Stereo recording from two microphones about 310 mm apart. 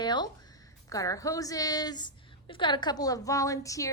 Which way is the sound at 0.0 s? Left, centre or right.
Centre.